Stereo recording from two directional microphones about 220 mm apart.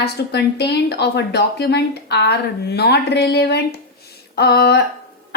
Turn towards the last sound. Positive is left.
turn(degrees=50)  # may be behind; listen again after turning